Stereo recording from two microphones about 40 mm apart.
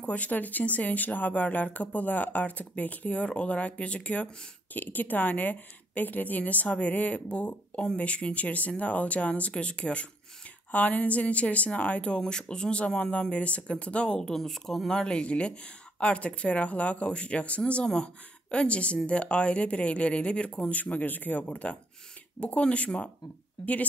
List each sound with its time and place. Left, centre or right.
0.0 s speech: left
4.7 s a woman's voice: left
12.2 s speech: left
14.3 s speech: centre
14.9 s speech: left
20.5 s speech: left